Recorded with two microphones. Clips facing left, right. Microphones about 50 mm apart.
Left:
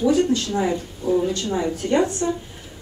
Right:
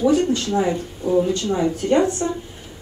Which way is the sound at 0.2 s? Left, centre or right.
Right.